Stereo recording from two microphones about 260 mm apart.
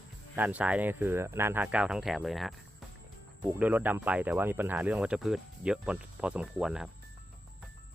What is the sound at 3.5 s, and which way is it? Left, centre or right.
Speech, centre.